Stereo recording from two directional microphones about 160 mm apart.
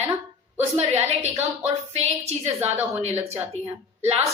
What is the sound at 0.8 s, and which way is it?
Speech, 45° right (ahead or behind).